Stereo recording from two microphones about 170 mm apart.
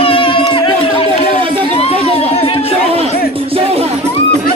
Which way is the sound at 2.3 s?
35° left (ahead or behind).